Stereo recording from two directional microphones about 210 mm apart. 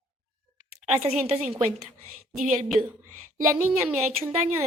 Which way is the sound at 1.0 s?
30° right (ahead or behind).